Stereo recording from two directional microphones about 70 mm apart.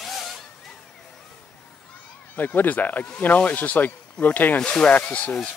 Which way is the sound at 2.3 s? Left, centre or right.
Left.